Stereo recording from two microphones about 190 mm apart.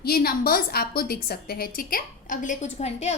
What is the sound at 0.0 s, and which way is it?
A woman's voice, 55° left (ahead or behind).